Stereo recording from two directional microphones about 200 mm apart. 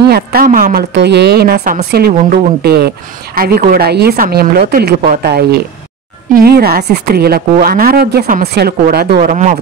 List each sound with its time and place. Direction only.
0.1 s a woman's voice: 50° right (ahead or behind)
9.3 s speech: 35° right (ahead or behind)